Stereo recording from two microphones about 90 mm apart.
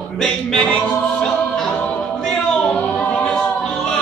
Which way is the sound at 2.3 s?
10° left (ahead or behind).